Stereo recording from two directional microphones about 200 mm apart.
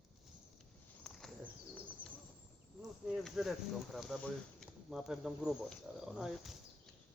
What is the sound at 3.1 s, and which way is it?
Speech, centre (ahead or behind).